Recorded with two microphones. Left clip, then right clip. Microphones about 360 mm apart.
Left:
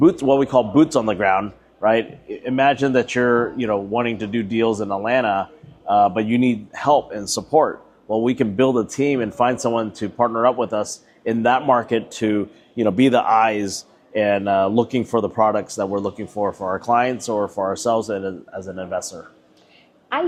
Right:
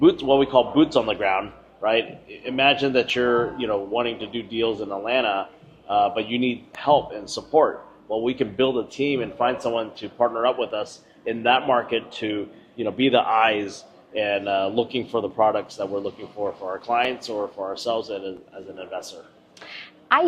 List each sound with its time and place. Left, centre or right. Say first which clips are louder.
0.0 s a man's voice: left 2 dB; left